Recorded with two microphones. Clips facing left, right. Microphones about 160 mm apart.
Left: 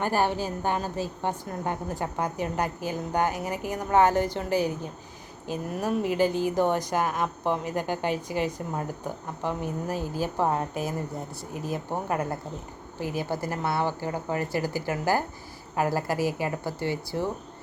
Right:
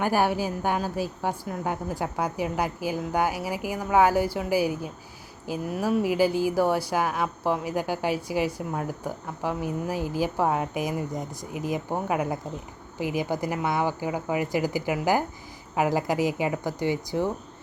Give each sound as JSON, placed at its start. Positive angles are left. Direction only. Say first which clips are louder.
{"t": 0.0, "sound": "speech", "louder": "right 2 dB", "side_deg": -10}